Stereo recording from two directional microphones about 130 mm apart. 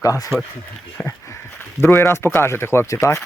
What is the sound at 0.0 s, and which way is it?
Speech, 25° left (ahead or behind).